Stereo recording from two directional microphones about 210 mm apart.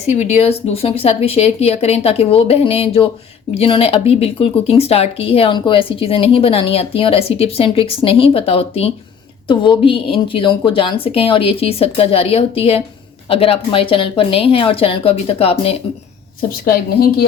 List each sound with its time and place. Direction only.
0.1 s speech: 30° left (ahead or behind)
16.6 s a woman's voice: 45° left (ahead or behind)